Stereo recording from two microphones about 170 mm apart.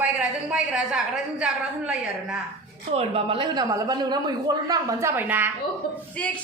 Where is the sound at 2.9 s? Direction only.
35° right (ahead or behind); by 5.5 s 10° right (ahead or behind).